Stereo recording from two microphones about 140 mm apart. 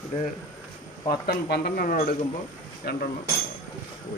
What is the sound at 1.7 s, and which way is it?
Speech, 85° left.